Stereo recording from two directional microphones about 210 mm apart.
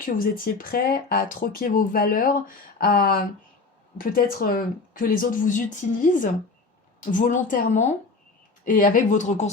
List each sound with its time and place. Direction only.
0.0 s speech: 40° left (ahead or behind)